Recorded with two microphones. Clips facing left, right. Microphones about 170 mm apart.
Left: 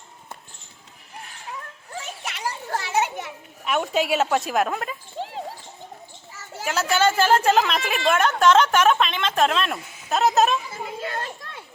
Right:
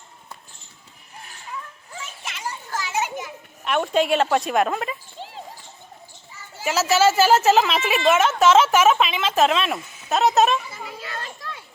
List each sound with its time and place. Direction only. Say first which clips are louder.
2.2 s children playing: left 1 dB; 65° left (ahead or behind)
3.6 s a woman's voice: right 2 dB; 5° left (ahead or behind)
6.7 s a woman's voice: right 3 dB; 5° right (ahead or behind)
11.0 s children playing: left 3 dB; 45° left (ahead or behind)